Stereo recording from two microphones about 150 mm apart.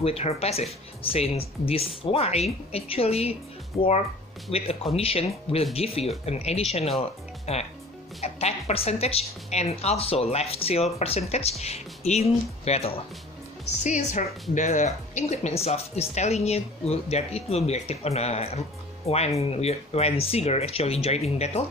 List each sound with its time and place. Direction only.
0.0 s a woman's voice: 40° left (ahead or behind)
4.5 s a woman's voice: 40° left (ahead or behind)
13.8 s a woman's voice: 55° left (ahead or behind)